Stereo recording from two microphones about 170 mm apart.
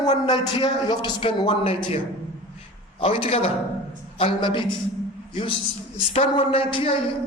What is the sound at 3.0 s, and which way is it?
A woman's voice, 30° left (ahead or behind).